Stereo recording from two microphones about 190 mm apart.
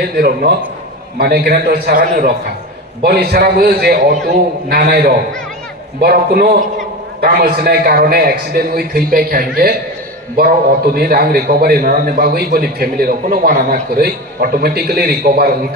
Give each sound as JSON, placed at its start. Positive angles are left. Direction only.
{"t": 0.2, "sound": "a man's voice", "side_deg": -55}